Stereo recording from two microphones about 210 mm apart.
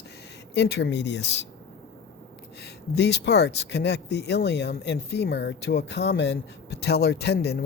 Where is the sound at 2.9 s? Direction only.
55° left (ahead or behind).